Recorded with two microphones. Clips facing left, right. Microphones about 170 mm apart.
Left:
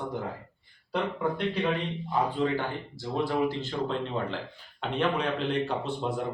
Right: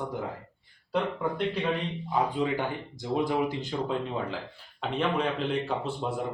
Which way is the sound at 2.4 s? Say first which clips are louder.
Even; 15° right (ahead or behind).